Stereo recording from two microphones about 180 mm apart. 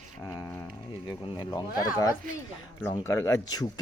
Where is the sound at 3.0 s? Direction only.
15° left (ahead or behind).